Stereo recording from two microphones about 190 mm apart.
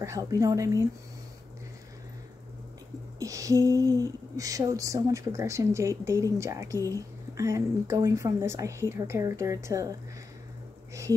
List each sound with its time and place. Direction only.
0.0 s speech: 15° right (ahead or behind)
3.2 s speech: 15° right (ahead or behind)